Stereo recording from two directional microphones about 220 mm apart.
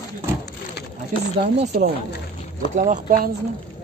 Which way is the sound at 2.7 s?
35° right (ahead or behind).